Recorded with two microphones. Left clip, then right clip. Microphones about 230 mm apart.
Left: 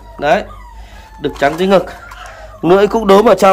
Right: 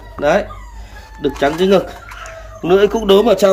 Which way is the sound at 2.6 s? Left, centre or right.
Left.